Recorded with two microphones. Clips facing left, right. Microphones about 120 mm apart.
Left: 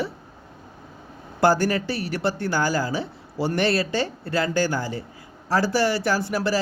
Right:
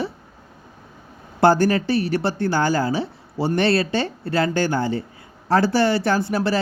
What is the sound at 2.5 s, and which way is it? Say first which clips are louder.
Speech: right 5 dB; 25° right (ahead or behind).